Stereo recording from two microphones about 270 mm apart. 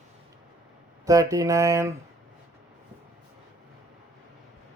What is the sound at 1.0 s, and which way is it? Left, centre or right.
Speech, centre.